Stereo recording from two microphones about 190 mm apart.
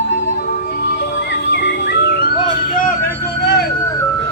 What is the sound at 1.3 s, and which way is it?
Music, 65° left (ahead or behind).